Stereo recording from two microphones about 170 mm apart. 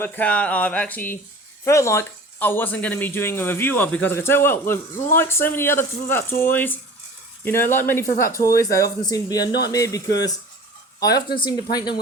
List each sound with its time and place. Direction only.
0.0 s speech: 10° left (ahead or behind); by 11.9 s 25° left (ahead or behind)